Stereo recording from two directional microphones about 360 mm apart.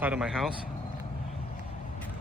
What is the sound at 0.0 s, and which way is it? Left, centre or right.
Speech, centre.